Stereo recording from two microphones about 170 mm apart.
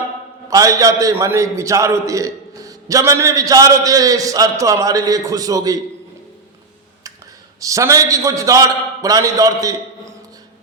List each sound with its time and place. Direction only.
0.5 s a man's voice: 20° right (ahead or behind)
7.6 s a man's voice: 20° right (ahead or behind)